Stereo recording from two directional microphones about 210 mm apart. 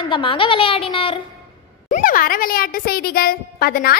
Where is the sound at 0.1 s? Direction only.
25° left (ahead or behind).